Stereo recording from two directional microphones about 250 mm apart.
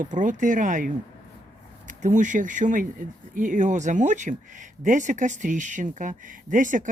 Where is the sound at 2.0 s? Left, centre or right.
Right.